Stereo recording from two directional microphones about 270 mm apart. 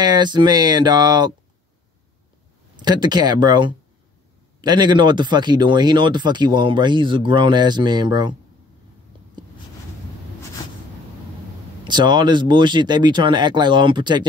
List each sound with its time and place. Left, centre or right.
0.0 s speech: centre
2.8 s speech: centre
11.9 s speech: centre